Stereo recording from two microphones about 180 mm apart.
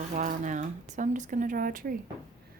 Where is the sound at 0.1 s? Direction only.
50° right (ahead or behind).